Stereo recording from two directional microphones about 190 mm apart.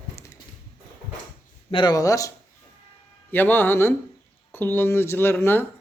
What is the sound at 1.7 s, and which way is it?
Speech, 20° left (ahead or behind).